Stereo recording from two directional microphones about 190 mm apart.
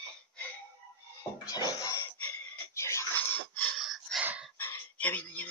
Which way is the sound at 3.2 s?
10° left (ahead or behind).